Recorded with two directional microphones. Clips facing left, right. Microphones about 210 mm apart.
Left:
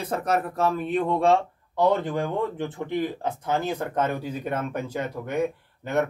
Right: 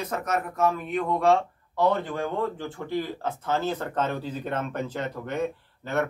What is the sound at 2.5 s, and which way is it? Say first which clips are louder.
Speech: left 2 dB; 20° left (ahead or behind).